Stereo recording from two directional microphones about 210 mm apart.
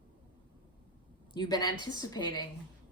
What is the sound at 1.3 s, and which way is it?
Speech, 20° left (ahead or behind).